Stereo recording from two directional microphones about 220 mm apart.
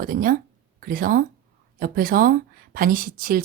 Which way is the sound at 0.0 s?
40° right (ahead or behind).